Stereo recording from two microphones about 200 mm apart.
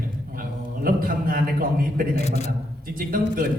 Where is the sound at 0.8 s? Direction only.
45° right (ahead or behind).